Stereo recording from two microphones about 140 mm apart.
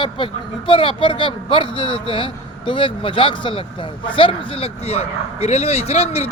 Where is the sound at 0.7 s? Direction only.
35° left (ahead or behind).